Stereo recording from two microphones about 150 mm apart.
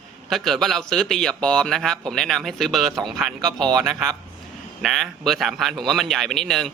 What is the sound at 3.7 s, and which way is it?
Speech, 15° right (ahead or behind).